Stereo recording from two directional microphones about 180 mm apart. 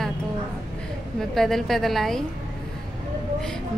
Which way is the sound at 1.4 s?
Centre (ahead or behind).